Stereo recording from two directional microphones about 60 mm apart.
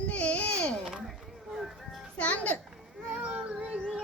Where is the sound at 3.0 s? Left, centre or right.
Right.